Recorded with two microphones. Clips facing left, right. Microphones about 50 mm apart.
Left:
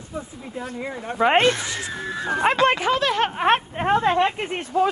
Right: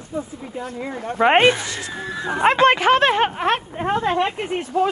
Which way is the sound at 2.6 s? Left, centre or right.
Right.